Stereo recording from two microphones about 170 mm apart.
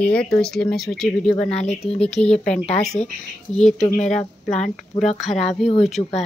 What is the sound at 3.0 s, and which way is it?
Speech, 40° left (ahead or behind).